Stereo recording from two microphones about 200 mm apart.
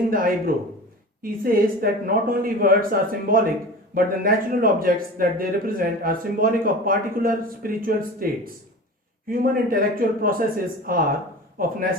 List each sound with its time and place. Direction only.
0.1 s speech: 45° right (ahead or behind)